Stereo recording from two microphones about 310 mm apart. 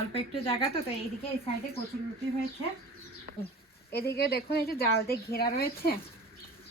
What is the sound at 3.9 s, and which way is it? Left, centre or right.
A woman's voice, left.